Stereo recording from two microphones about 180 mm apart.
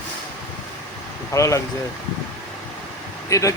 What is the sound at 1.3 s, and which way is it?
Speech, 15° left (ahead or behind).